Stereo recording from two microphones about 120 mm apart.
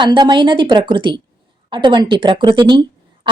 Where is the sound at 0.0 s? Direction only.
40° right (ahead or behind).